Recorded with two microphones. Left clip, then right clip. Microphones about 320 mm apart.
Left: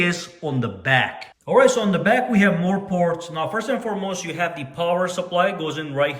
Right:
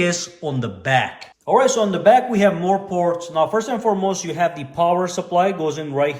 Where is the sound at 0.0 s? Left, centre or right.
Centre.